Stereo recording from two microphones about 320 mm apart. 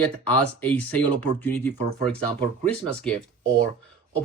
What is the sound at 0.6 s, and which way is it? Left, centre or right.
Speech, centre.